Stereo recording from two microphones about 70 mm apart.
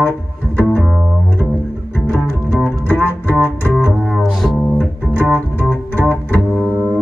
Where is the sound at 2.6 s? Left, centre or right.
Left.